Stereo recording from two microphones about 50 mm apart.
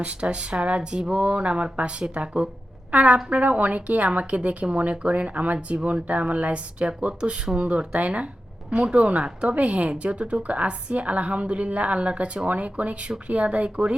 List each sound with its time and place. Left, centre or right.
0.0 s a woman's voice: right